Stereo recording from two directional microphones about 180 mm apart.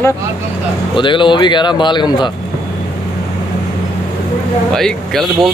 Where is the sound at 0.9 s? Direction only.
25° left (ahead or behind).